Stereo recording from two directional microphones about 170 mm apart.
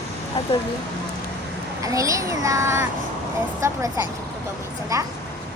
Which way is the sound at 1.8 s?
20° right (ahead or behind).